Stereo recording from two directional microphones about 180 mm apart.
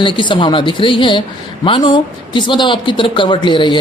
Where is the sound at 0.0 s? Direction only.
25° left (ahead or behind).